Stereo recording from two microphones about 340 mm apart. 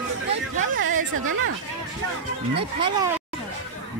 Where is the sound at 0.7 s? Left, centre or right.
Right.